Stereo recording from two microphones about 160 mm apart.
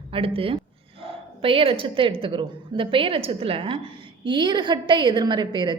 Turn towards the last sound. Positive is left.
turn(degrees=-30)  # may be behind; listen again after turning